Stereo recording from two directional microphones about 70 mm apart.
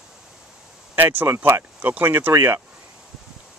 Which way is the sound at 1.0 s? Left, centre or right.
Right.